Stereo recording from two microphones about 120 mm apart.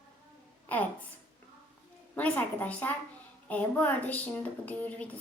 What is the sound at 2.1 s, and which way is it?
A woman's voice, 10° left (ahead or behind).